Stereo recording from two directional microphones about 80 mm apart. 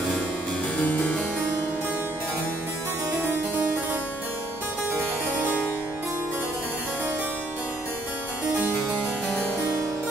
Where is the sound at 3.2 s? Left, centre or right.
Right.